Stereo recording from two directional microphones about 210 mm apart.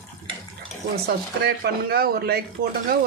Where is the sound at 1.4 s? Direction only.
45° right (ahead or behind).